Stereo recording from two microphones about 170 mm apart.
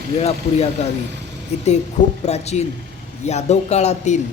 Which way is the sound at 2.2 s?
40° left (ahead or behind).